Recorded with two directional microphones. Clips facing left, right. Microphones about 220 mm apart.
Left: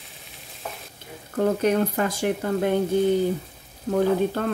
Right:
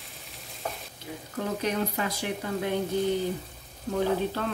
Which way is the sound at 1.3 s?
50° left (ahead or behind).